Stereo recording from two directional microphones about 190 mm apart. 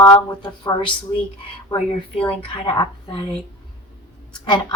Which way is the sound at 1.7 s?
25° left (ahead or behind).